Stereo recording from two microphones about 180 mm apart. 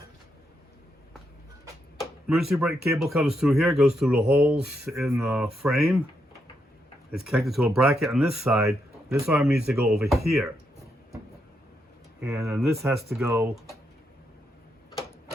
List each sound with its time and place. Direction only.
2.0 s a sound: centre (ahead or behind)
2.9 s speech: centre (ahead or behind)
7.1 s speech: 5° right (ahead or behind)
8.6 s a sound: 15° right (ahead or behind)
9.2 s speech: 10° right (ahead or behind)
12.2 s speech: 15° right (ahead or behind)